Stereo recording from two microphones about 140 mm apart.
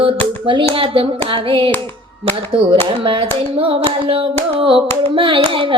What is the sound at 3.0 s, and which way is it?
Child singing, 40° right (ahead or behind).